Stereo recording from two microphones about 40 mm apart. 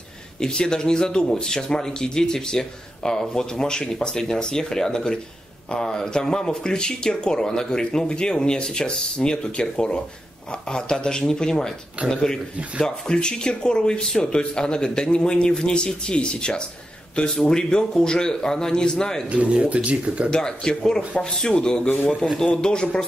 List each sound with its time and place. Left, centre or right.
0.4 s speech: centre
19.2 s speech: right
20.2 s speech: centre